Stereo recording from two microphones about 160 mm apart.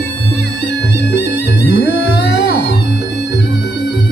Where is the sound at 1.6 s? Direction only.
75° left (ahead or behind).